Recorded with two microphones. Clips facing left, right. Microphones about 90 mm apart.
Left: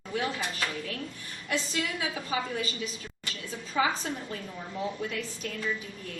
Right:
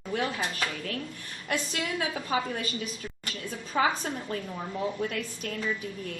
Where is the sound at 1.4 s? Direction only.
50° right (ahead or behind).